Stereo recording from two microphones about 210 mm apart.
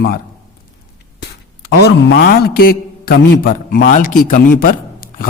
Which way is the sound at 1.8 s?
50° left (ahead or behind).